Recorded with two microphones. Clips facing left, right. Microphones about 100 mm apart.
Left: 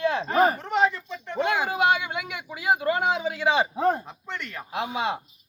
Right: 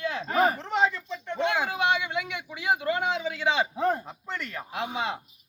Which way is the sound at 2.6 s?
5° left (ahead or behind).